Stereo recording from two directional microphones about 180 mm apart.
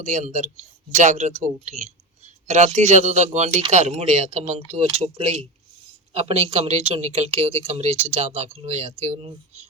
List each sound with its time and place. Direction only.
0.0 s speech: 45° right (ahead or behind)